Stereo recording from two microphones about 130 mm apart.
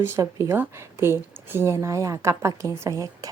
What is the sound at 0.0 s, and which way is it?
A woman's voice, 25° right (ahead or behind).